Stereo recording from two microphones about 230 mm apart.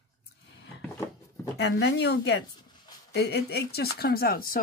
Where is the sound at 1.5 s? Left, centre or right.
Left.